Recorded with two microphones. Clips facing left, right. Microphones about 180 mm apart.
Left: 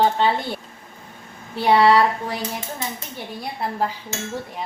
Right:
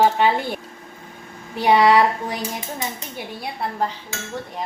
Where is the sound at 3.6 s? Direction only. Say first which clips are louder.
Even; 5° left (ahead or behind).